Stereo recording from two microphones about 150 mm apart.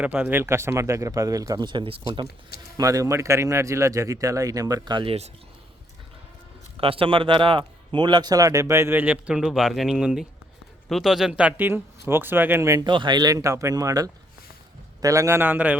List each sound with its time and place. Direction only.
0.0 s speech: 10° right (ahead or behind); by 2.2 s 35° right (ahead or behind)
2.7 s speech: 20° right (ahead or behind)
6.7 s a man's voice: 40° right (ahead or behind); by 12.8 s 20° right (ahead or behind)
12.8 s a man's voice: 30° right (ahead or behind); by 15.8 s 10° right (ahead or behind)